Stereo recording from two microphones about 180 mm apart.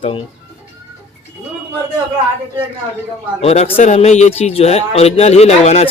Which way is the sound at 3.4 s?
35° left (ahead or behind).